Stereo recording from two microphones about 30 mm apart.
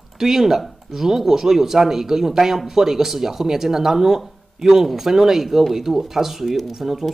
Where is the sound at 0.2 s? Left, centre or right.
Centre.